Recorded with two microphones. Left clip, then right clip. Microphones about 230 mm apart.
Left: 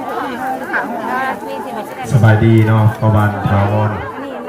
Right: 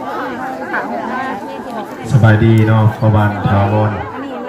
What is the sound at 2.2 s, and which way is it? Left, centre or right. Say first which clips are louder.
Speech: even; right.